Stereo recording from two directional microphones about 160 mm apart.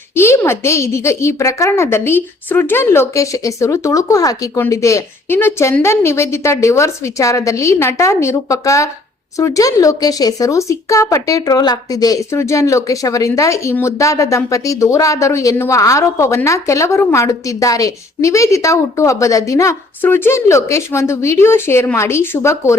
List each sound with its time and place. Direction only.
0.1 s a woman's voice: 15° left (ahead or behind)